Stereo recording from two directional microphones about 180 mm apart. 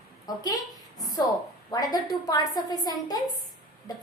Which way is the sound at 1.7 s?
20° left (ahead or behind).